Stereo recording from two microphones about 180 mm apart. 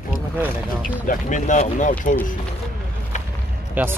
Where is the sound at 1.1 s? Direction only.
45° left (ahead or behind).